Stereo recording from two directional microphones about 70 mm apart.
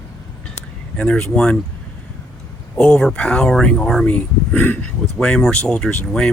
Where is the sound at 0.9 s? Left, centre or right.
Centre.